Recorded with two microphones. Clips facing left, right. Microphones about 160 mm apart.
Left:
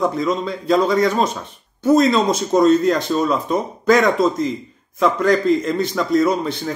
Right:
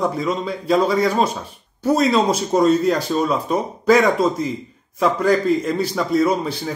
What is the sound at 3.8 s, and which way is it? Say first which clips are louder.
Speech: even; 35° right (ahead or behind).